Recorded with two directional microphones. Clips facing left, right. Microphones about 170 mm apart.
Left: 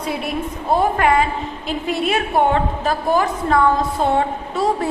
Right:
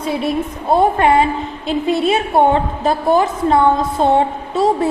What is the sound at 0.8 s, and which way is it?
A woman's voice, 25° right (ahead or behind).